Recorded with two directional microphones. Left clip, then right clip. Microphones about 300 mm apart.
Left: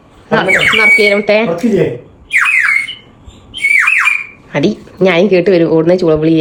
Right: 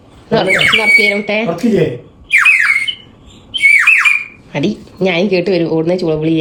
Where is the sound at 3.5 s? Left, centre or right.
Centre.